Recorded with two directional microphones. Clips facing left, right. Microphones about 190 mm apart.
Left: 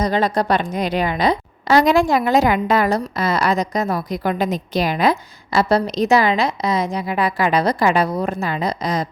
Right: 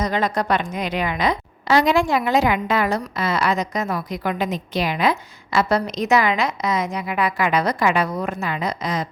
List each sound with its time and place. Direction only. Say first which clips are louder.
0.0 s a woman's voice: left 3 dB; 35° left (ahead or behind)